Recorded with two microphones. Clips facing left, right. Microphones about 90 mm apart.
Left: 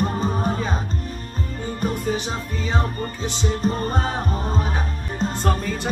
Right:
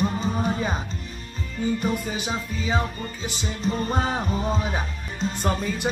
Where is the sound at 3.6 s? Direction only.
45° left (ahead or behind).